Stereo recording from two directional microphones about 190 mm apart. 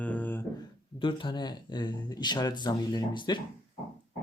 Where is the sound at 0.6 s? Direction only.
25° left (ahead or behind).